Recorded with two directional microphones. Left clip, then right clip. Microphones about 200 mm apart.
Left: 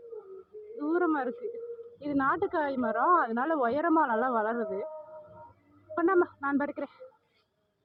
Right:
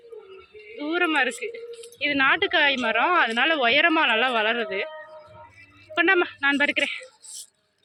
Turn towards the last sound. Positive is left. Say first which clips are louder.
# right 10 dB
turn(degrees=-25)  # may be behind; listen again after turning